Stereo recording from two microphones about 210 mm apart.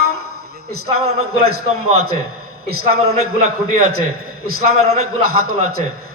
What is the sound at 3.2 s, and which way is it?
A man's voice, 90° right.